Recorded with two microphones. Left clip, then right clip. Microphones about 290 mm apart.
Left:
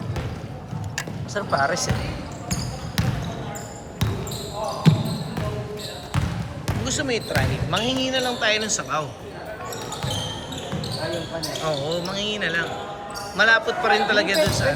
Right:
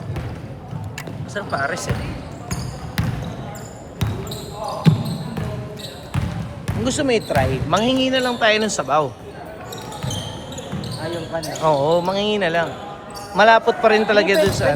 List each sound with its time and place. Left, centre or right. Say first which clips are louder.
0.9 s music: left 1 dB; left
4.9 s a sound: right 1 dB; centre
6.8 s speech: right 6 dB; centre
11.9 s speech: right 8 dB; centre